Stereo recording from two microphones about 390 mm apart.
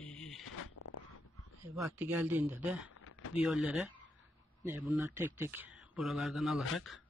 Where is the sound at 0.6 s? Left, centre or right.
Left.